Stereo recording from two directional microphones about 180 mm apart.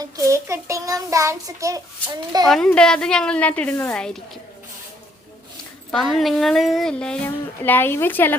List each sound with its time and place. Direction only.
0.0 s a child's voice: 15° right (ahead or behind)
2.5 s a woman's voice: 5° left (ahead or behind)
5.9 s a woman's voice: centre (ahead or behind)